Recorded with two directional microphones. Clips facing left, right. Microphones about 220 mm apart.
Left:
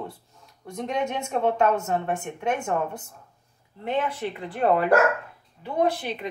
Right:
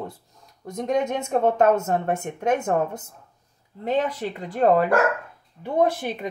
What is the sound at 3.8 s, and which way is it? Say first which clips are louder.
A woman's voice: right 3 dB; 40° right (ahead or behind).